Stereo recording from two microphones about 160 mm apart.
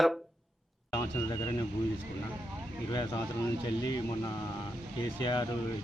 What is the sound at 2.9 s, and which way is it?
Speech, 25° left (ahead or behind).